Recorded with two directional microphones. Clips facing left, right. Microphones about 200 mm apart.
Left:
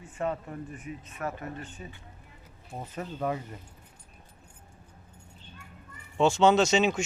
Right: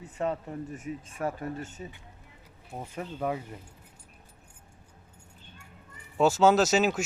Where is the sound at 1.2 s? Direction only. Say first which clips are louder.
Right 3 dB; 30° right (ahead or behind).